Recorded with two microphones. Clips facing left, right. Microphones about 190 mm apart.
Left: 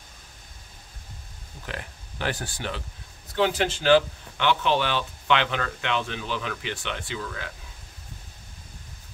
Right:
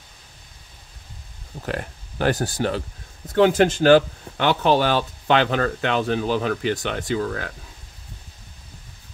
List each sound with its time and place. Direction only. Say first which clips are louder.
1.7 s speech: right 9 dB; 45° right (ahead or behind)